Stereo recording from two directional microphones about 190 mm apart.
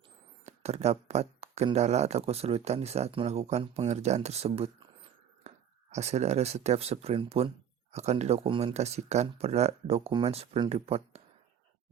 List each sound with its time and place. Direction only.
0.4 s speech: 35° right (ahead or behind)